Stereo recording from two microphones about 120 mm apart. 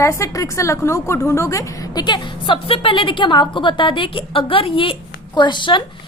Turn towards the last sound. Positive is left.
turn(degrees=40)  # may be behind; listen again after turning